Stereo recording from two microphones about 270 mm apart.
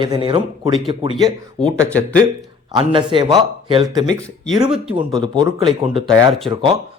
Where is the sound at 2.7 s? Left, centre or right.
Centre.